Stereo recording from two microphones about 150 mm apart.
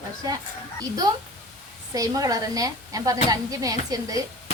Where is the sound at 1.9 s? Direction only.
25° right (ahead or behind).